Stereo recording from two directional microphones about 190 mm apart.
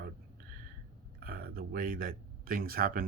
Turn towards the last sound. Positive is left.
turn(degrees=-50)  # may be behind; listen again after turning